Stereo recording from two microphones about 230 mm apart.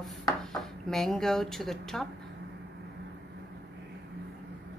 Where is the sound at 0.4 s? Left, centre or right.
Centre.